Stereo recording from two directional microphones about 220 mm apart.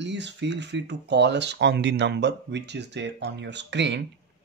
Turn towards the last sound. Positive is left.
turn(degrees=-50)  # may be behind; listen again after turning